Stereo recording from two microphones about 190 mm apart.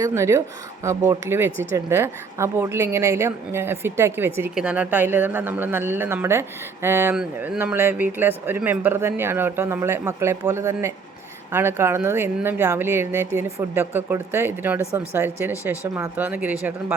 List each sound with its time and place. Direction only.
0.0 s speech: 15° right (ahead or behind)